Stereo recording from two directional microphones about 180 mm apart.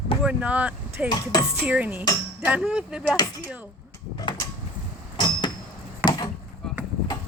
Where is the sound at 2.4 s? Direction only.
5° right (ahead or behind).